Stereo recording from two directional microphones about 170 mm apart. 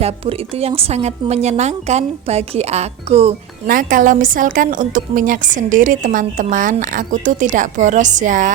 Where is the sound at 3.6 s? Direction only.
55° right (ahead or behind).